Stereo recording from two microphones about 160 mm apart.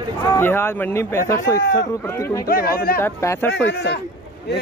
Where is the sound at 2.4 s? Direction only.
65° left (ahead or behind).